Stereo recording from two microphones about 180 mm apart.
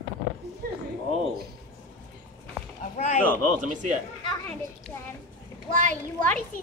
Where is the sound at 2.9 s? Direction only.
40° left (ahead or behind).